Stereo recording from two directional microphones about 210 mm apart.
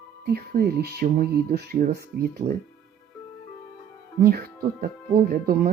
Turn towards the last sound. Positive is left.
turn(degrees=-45)  # may be behind; listen again after turning